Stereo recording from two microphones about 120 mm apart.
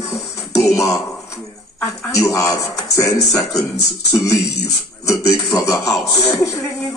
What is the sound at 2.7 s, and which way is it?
A man's voice, 30° left (ahead or behind).